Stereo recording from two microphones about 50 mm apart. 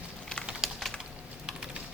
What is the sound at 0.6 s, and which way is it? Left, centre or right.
Typing, centre.